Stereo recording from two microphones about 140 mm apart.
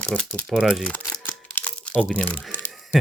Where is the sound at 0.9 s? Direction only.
10° left (ahead or behind).